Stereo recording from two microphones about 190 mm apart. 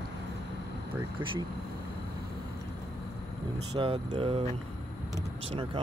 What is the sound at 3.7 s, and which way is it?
Speech, 25° right (ahead or behind).